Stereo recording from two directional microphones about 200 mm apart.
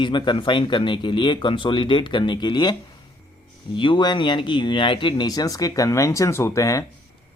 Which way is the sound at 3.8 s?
25° left (ahead or behind).